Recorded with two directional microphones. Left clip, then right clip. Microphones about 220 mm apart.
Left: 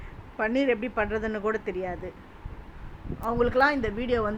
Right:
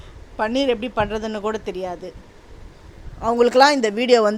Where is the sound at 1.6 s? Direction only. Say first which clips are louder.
Right 4 dB; 35° right (ahead or behind).